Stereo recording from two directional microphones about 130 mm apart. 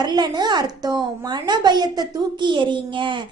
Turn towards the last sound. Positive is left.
turn(degrees=-40)  # may be behind; listen again after turning